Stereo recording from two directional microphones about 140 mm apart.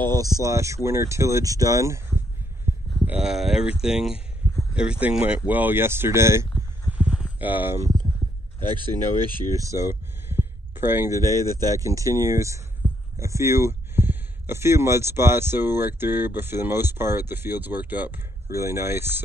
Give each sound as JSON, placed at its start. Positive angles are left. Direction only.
{"t": 0.0, "sound": "speech", "side_deg": -30}
{"t": 3.1, "sound": "speech", "side_deg": -5}
{"t": 6.9, "sound": "a sound", "side_deg": -10}
{"t": 9.3, "sound": "heart sounds", "side_deg": -20}
{"t": 11.5, "sound": "speech", "side_deg": -25}
{"t": 12.8, "sound": "heart sounds", "side_deg": 10}
{"t": 13.2, "sound": "speech", "side_deg": -20}